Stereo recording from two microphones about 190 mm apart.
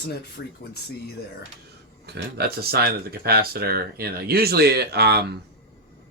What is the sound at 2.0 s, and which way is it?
Speech, 55° right (ahead or behind).